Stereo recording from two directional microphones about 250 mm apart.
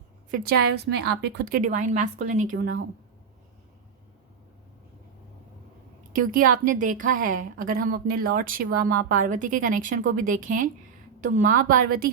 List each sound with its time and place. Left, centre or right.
0.4 s a woman's voice: right
6.1 s a woman's voice: right